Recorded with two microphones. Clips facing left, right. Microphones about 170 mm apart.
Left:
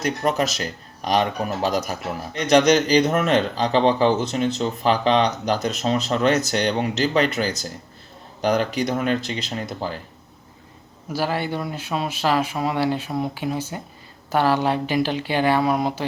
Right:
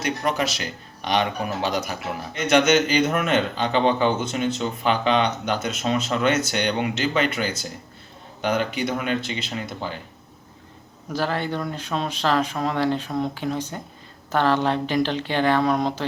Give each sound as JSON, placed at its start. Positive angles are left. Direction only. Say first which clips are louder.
{"t": 0.0, "sound": "speech", "louder": "left 2 dB", "side_deg": 0}
{"t": 2.5, "sound": "speech", "louder": "left 3 dB", "side_deg": 35}
{"t": 9.6, "sound": "speech", "louder": "left 3 dB", "side_deg": 0}
{"t": 11.1, "sound": "speech", "louder": "left 1 dB", "side_deg": 10}